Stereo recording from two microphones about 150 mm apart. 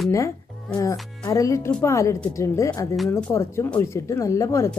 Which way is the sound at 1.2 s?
20° left (ahead or behind).